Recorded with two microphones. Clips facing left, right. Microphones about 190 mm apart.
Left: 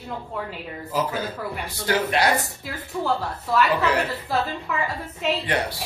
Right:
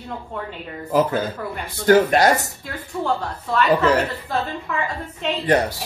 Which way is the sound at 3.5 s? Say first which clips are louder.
Even; 5° left (ahead or behind).